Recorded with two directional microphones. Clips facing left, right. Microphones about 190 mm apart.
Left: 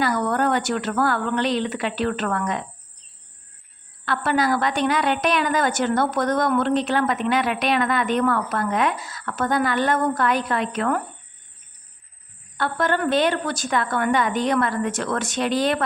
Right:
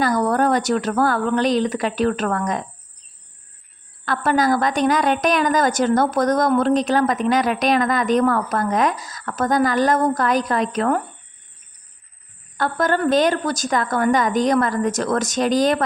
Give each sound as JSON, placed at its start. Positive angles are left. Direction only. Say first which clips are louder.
{"t": 0.0, "sound": "a woman's voice", "louder": "right 3 dB", "side_deg": -40}
{"t": 4.0, "sound": "a woman's voice", "louder": "right 3 dB", "side_deg": -40}
{"t": 12.5, "sound": "a woman's voice", "louder": "right 2 dB", "side_deg": -40}